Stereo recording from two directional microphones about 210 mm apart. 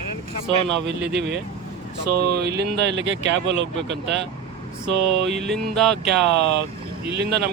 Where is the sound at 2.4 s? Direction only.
50° right (ahead or behind).